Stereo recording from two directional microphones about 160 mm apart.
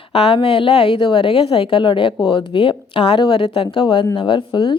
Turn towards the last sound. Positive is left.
turn(degrees=30)  # may be behind; listen again after turning